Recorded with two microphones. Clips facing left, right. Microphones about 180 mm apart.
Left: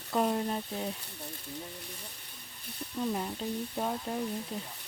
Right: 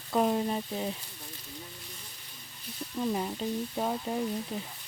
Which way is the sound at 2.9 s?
5° right (ahead or behind).